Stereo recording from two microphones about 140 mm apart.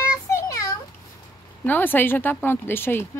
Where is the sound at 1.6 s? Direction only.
15° left (ahead or behind).